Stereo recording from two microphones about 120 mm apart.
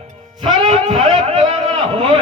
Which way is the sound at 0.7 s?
55° right (ahead or behind).